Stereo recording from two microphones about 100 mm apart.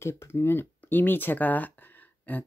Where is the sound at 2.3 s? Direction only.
15° left (ahead or behind).